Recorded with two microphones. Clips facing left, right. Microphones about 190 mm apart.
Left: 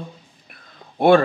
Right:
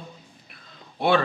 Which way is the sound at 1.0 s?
50° left (ahead or behind).